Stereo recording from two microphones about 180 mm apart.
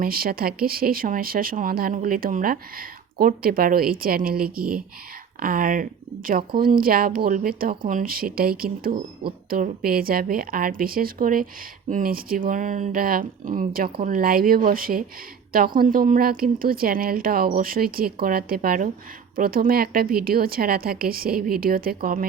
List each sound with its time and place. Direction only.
0.0 s speech: 55° right (ahead or behind)